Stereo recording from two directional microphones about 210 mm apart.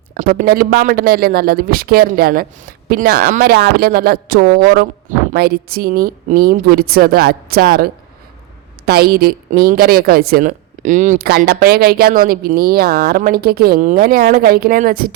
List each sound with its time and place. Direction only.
0.1 s a woman's voice: 45° right (ahead or behind)
8.9 s a woman's voice: 45° right (ahead or behind)